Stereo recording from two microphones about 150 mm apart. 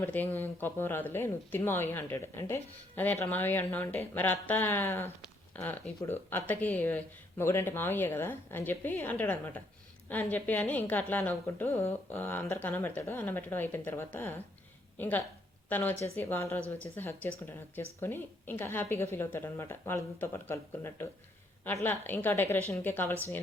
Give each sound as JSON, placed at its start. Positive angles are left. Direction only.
{"t": 0.0, "sound": "speech", "side_deg": 10}